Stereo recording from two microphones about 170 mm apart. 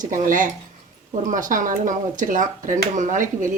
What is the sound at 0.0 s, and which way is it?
Speech, 50° right (ahead or behind).